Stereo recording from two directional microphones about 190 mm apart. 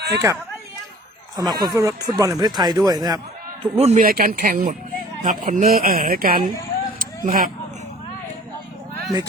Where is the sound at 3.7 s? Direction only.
35° right (ahead or behind).